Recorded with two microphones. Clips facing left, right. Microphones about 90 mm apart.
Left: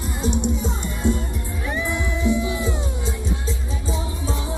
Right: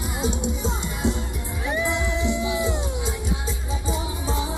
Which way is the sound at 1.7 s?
20° right (ahead or behind).